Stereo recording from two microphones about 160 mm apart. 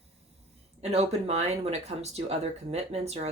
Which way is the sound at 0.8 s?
40° right (ahead or behind).